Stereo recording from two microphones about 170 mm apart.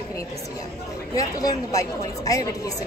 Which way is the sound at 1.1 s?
20° left (ahead or behind).